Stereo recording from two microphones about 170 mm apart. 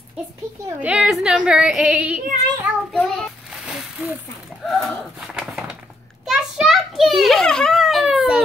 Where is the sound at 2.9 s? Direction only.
5° left (ahead or behind).